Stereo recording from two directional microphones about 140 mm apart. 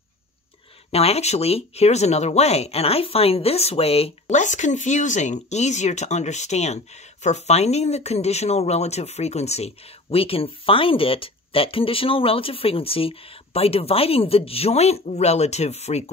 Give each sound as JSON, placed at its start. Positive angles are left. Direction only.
{"t": 0.9, "sound": "speech", "side_deg": 50}